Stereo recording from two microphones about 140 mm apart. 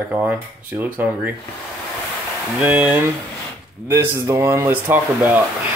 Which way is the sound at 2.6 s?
10° right (ahead or behind).